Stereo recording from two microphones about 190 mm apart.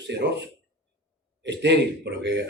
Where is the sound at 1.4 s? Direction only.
65° right (ahead or behind).